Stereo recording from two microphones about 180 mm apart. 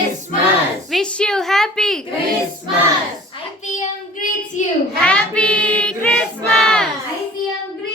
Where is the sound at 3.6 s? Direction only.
45° left (ahead or behind).